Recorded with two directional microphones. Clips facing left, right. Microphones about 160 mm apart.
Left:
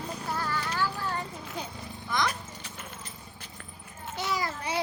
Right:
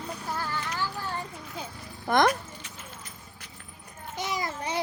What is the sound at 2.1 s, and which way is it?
Speech, 55° right (ahead or behind).